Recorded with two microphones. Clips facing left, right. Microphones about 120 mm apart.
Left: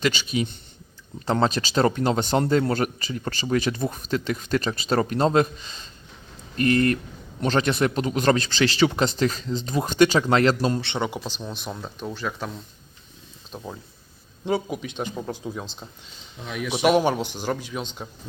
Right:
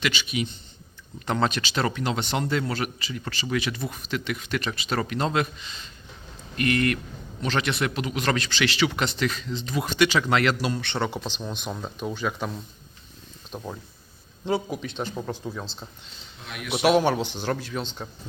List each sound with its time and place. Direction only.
0.0 s a man's voice: 40° left (ahead or behind)
10.8 s speech: 15° left (ahead or behind); by 13.7 s centre (ahead or behind)
14.7 s speech: 10° left (ahead or behind)
16.8 s speech: 10° left (ahead or behind)